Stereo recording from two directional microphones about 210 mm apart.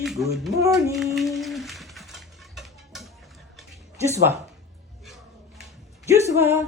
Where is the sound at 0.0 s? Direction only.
Centre (ahead or behind).